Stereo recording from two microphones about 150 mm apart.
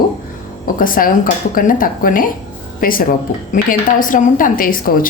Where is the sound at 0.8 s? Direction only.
65° left (ahead or behind).